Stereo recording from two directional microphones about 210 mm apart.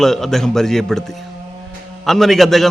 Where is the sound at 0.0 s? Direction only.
Centre (ahead or behind).